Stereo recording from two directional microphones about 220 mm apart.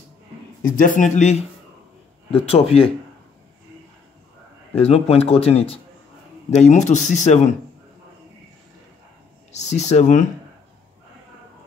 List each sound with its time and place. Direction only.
0.7 s speech: 35° left (ahead or behind)
4.7 s speech: 30° left (ahead or behind)
9.5 s speech: 30° left (ahead or behind)